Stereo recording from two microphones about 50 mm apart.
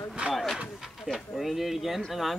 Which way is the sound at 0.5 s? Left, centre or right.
Centre.